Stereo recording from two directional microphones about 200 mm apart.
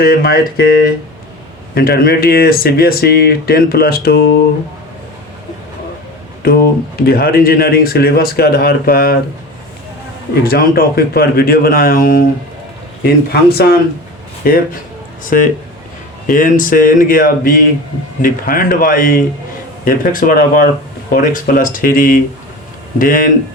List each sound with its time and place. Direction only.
0.0 s speech: 50° left (ahead or behind)
6.4 s speech: 50° left (ahead or behind)
10.4 s speech: 50° left (ahead or behind)